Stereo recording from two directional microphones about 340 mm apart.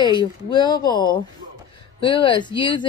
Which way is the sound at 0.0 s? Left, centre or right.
Centre.